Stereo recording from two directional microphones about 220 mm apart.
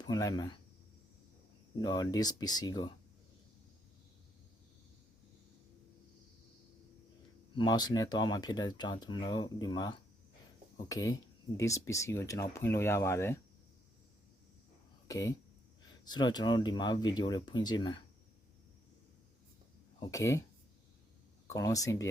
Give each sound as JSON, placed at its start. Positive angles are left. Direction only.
{"t": 0.0, "sound": "speech", "side_deg": 15}
{"t": 1.8, "sound": "speech", "side_deg": 20}
{"t": 7.5, "sound": "speech", "side_deg": 20}
{"t": 15.0, "sound": "speech", "side_deg": 15}
{"t": 20.0, "sound": "speech", "side_deg": 15}
{"t": 21.4, "sound": "speech", "side_deg": 15}